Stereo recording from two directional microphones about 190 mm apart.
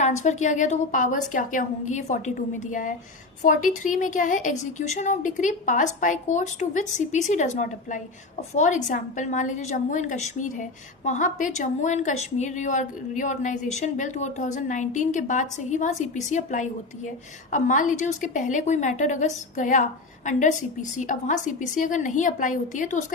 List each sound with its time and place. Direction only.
0.0 s a woman's voice: 40° left (ahead or behind)